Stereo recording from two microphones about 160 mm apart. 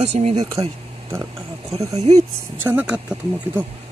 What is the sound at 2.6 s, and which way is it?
Speech, 5° right (ahead or behind).